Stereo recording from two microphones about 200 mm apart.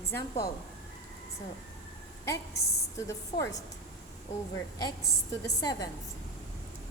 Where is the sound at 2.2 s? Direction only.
15° left (ahead or behind).